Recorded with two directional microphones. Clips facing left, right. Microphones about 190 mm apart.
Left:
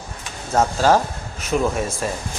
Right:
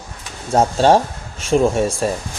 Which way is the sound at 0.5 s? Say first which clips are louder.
Right 3 dB; 30° right (ahead or behind).